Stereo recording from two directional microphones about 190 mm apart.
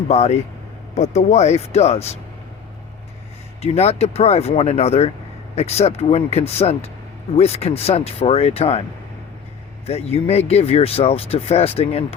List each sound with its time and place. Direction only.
0.1 s speech: 35° left (ahead or behind)
3.6 s speech: 35° left (ahead or behind)
9.8 s speech: 30° left (ahead or behind)